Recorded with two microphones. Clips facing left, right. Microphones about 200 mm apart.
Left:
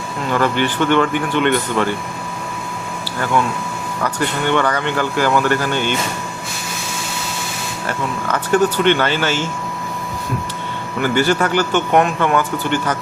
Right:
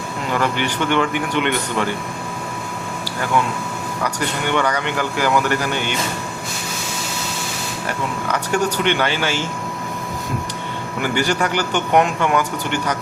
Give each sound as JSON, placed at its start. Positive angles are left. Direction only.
{"t": 0.5, "sound": "speech", "side_deg": -15}
{"t": 4.0, "sound": "speech", "side_deg": -15}
{"t": 7.9, "sound": "speech", "side_deg": -15}
{"t": 11.0, "sound": "speech", "side_deg": -15}